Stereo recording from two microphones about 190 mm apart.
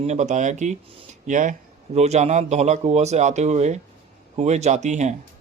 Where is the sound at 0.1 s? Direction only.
40° right (ahead or behind).